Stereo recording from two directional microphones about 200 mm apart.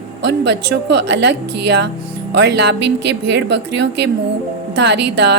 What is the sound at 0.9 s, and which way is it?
Speech, 60° right (ahead or behind).